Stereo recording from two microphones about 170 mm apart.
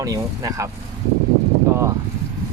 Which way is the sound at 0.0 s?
20° right (ahead or behind).